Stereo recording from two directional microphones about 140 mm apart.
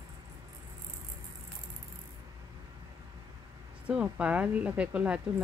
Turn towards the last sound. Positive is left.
turn(degrees=-10)  # may be behind; listen again after turning